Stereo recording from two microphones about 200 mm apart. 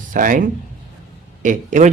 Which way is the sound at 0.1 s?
40° right (ahead or behind).